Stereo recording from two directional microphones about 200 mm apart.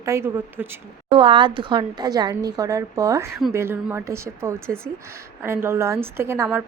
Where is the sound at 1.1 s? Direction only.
25° right (ahead or behind).